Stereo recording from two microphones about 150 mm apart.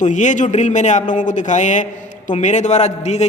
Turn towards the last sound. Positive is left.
turn(degrees=50)  # may be behind; listen again after turning